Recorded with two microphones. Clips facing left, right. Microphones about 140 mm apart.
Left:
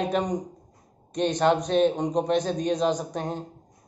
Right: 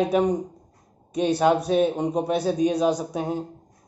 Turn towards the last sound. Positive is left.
turn(degrees=-10)  # may be behind; listen again after turning